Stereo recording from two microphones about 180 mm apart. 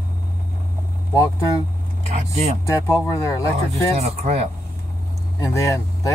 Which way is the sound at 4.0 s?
35° right (ahead or behind).